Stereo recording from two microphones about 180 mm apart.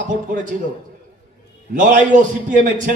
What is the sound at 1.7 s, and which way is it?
Speech, 50° right (ahead or behind).